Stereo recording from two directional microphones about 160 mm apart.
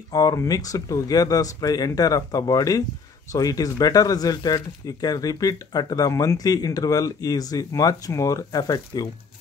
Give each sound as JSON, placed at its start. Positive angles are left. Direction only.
{"t": 0.1, "sound": "speech", "side_deg": 20}